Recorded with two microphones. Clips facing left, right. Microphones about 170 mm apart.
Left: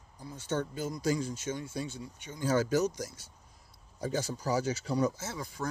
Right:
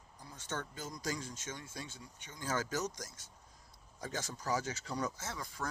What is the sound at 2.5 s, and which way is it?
Speech, 10° left (ahead or behind).